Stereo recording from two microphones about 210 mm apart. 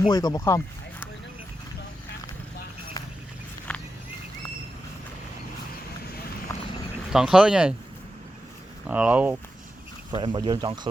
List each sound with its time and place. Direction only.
0.1 s speech: 20° left (ahead or behind)
3.7 s a sound: 5° left (ahead or behind)
6.0 s vehicle: 45° left (ahead or behind)
6.5 s a sound: 15° left (ahead or behind)
7.1 s speech: centre (ahead or behind)
8.9 s speech: 5° right (ahead or behind)
10.1 s speech: 25° right (ahead or behind)